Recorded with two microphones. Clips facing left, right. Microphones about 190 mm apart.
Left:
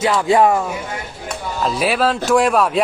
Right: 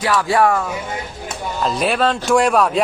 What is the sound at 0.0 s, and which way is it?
Speech, 20° left (ahead or behind).